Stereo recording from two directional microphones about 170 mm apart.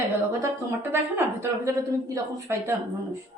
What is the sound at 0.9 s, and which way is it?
Speech, 15° right (ahead or behind).